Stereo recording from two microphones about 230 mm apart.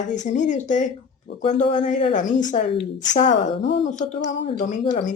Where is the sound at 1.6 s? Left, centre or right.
Left.